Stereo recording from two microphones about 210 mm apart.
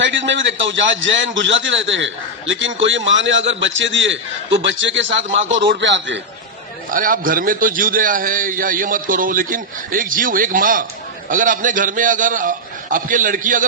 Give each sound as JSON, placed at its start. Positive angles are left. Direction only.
{"t": 0.0, "sound": "a man's voice", "side_deg": -60}
{"t": 6.9, "sound": "a man's voice", "side_deg": -40}